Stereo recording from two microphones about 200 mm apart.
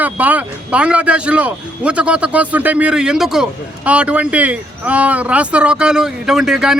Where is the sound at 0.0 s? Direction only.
10° right (ahead or behind).